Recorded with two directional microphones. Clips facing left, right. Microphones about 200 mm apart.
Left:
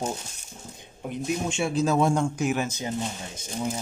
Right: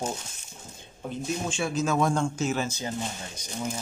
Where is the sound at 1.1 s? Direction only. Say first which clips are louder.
Left 3 dB; 25° left (ahead or behind).